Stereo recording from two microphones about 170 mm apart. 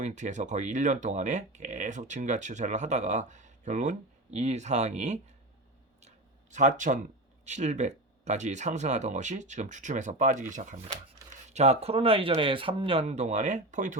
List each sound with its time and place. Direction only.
0.0 s speech: 45° right (ahead or behind)
6.0 s a sound: 45° right (ahead or behind)
7.4 s speech: 45° right (ahead or behind)